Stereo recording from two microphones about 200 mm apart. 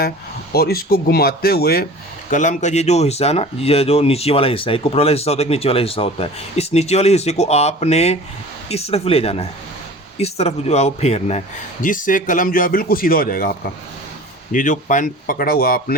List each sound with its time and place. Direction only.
0.5 s speech: 50° left (ahead or behind)
2.3 s speech: 40° left (ahead or behind)